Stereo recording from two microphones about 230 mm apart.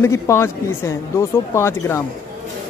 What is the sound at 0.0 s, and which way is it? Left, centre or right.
Speech, centre.